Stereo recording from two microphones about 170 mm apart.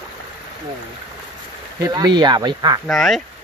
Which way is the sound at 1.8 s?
25° right (ahead or behind).